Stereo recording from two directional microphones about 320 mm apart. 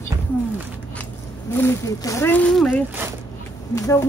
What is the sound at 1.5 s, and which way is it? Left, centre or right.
Speech, centre.